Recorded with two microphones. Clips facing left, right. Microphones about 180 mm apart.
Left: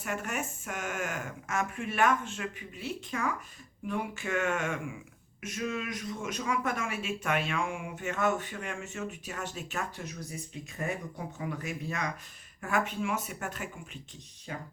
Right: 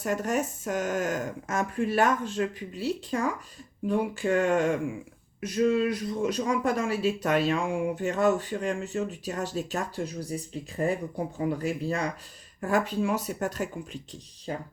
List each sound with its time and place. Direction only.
0.0 s speech: 35° right (ahead or behind)